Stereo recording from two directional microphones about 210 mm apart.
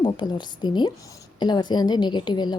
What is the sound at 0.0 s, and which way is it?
A woman's voice, 20° left (ahead or behind).